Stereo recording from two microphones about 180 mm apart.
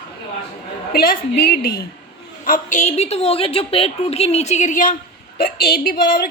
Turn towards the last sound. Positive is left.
turn(degrees=55)  # may be behind; listen again after turning